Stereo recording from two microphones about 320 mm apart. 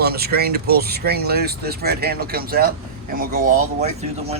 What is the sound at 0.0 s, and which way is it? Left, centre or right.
Speech, right.